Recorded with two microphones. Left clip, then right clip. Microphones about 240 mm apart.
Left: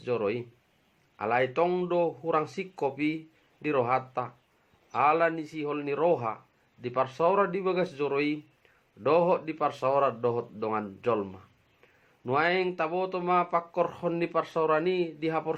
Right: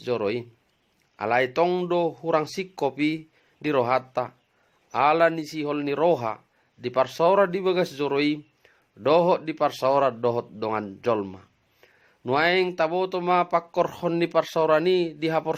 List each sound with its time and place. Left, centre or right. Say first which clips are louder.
0.0 s speech: right 3 dB; right